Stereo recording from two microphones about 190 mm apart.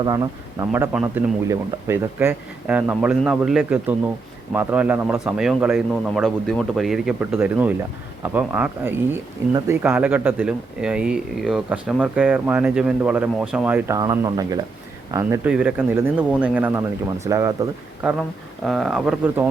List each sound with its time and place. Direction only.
0.0 s speech: 20° right (ahead or behind)
15.4 s speech: 5° right (ahead or behind)
18.0 s speech: 5° right (ahead or behind)